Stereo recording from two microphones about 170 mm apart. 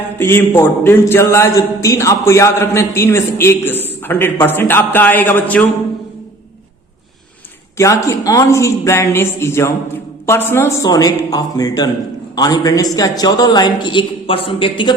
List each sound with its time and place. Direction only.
0.2 s a man's voice: 15° left (ahead or behind)
7.8 s a man's voice: 20° left (ahead or behind)